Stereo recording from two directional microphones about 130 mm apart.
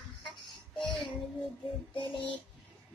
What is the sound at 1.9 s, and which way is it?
Child singing, 40° left (ahead or behind).